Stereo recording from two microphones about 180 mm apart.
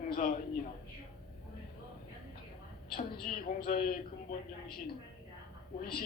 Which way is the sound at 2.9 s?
55° left (ahead or behind).